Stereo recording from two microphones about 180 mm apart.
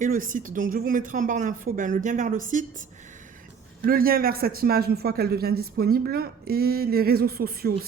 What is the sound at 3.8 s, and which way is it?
A man's voice, 55° right (ahead or behind).